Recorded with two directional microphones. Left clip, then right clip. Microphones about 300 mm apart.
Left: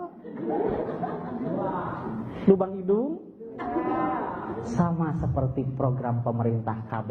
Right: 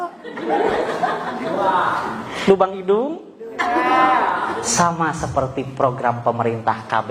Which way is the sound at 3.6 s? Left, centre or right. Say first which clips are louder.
Right 12 dB; centre.